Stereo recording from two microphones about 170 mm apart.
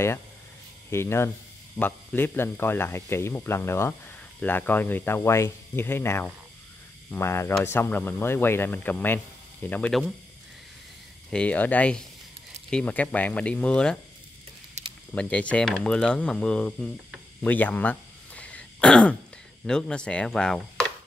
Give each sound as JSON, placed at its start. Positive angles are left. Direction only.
{"t": 0.8, "sound": "speech", "side_deg": 15}
{"t": 11.2, "sound": "speech", "side_deg": 5}
{"t": 14.8, "sound": "a sound", "side_deg": -40}
{"t": 15.1, "sound": "speech", "side_deg": 5}
{"t": 17.4, "sound": "throat clearing", "side_deg": 10}
{"t": 19.6, "sound": "speech", "side_deg": 5}